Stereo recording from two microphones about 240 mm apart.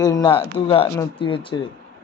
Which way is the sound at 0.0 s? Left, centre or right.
Centre.